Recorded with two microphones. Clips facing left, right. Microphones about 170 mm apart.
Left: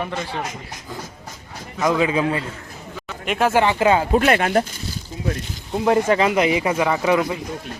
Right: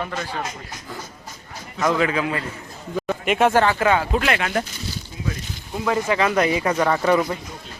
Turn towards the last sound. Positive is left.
turn(degrees=10)  # may be behind; listen again after turning